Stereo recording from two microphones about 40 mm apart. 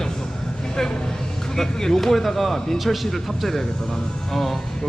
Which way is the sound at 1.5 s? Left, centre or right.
Centre.